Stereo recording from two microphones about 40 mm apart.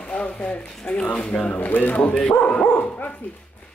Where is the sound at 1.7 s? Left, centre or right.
Left.